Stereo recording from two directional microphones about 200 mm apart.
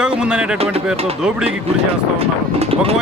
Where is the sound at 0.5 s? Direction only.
30° right (ahead or behind).